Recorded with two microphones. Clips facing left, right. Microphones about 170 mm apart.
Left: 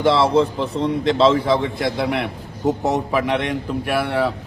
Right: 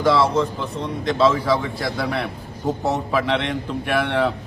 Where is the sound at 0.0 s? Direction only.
30° left (ahead or behind).